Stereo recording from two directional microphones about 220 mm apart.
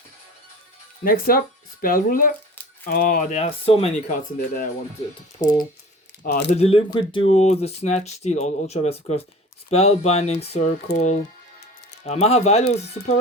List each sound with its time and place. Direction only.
1.0 s speech: 40° left (ahead or behind)
5.4 s speech: 15° left (ahead or behind)
6.6 s speech: 25° left (ahead or behind)